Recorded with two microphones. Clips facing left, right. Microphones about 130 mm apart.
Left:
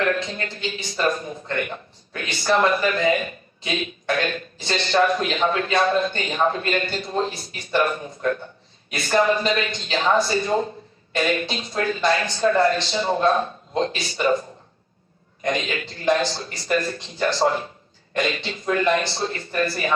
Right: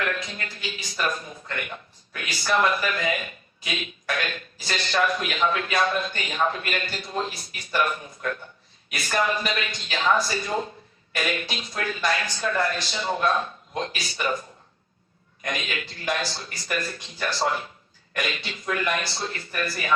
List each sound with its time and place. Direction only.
0.0 s speech: 35° left (ahead or behind)